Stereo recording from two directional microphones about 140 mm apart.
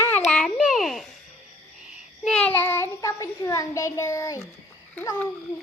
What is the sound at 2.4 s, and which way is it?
A child's voice, 15° left (ahead or behind).